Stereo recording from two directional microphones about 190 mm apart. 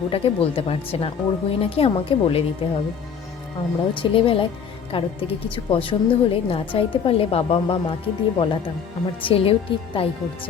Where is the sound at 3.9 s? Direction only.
25° left (ahead or behind).